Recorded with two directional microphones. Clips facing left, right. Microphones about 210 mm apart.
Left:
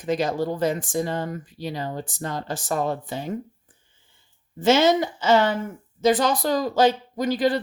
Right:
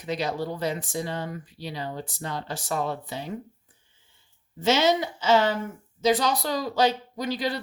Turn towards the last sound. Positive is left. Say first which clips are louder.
# left 7 dB
turn(degrees=50)  # may be behind; listen again after turning